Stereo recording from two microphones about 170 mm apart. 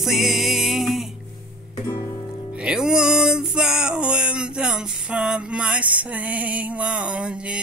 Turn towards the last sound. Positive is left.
turn(degrees=-5)  # may be behind; listen again after turning